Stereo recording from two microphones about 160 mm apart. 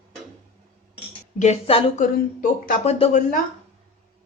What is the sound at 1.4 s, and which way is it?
A woman's voice, 40° left (ahead or behind).